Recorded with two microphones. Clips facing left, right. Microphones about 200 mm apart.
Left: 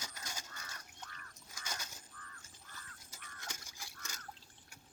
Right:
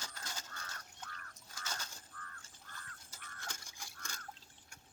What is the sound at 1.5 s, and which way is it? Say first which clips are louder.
Crow: even; 10° left (ahead or behind).